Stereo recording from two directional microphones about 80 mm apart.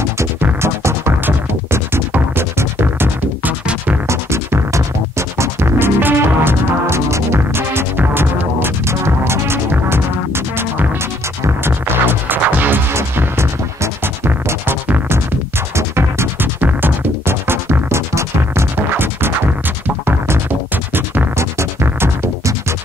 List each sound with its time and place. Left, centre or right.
0.6 s music: right
4.1 s music: right